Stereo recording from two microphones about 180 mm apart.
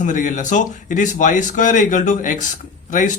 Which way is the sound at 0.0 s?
45° left (ahead or behind).